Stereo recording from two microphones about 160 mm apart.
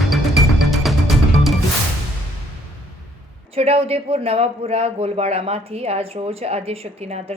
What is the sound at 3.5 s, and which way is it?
A man's voice, 35° right (ahead or behind).